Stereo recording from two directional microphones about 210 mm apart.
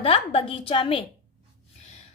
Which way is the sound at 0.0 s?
25° left (ahead or behind).